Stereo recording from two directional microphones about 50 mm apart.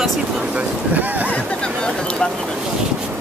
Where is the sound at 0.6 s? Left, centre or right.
Right.